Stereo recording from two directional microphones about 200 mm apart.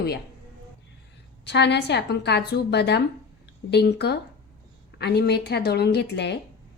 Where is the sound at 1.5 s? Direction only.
60° left (ahead or behind).